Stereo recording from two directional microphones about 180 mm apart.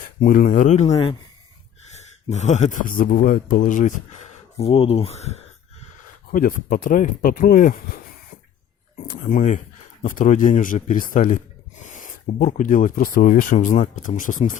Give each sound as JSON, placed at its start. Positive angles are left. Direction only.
{"t": 0.2, "sound": "speech", "side_deg": 50}
{"t": 2.3, "sound": "speech", "side_deg": 40}
{"t": 4.5, "sound": "speech", "side_deg": 30}
{"t": 6.3, "sound": "speech", "side_deg": 50}
{"t": 9.3, "sound": "speech", "side_deg": 40}